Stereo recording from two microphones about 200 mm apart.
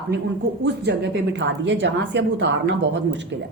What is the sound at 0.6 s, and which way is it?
A woman's voice, 60° right (ahead or behind).